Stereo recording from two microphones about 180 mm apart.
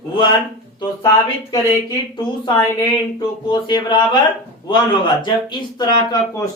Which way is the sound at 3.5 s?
25° left (ahead or behind).